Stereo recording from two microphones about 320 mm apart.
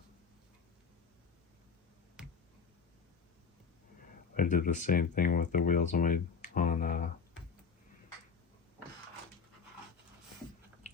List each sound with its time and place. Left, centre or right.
4.4 s speech: left